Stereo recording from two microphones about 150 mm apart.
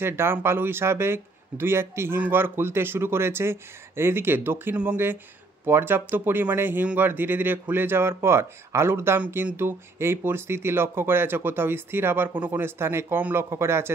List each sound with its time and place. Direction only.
0.0 s speech: 15° right (ahead or behind)